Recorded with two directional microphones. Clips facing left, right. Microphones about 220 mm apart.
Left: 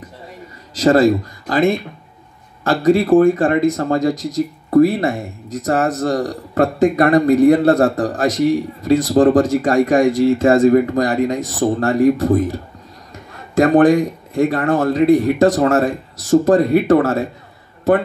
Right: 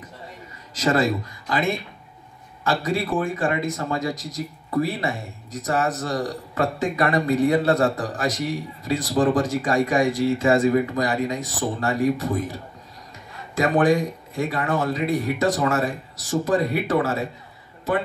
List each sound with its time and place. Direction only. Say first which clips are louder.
0.7 s speech: left 9 dB; 40° left (ahead or behind)
13.6 s speech: left 8 dB; 50° left (ahead or behind)